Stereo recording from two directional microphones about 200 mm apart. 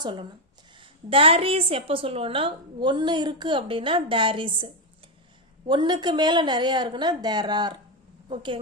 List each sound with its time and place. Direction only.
0.0 s a woman's voice: 25° right (ahead or behind)